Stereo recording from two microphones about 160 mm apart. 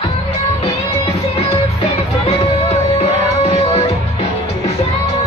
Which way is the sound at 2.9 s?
40° left (ahead or behind).